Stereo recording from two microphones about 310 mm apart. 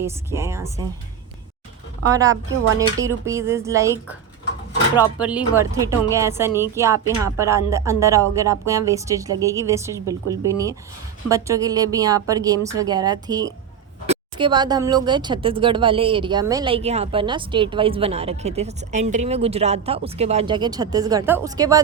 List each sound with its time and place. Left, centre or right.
0.0 s speech: centre
2.7 s speech: centre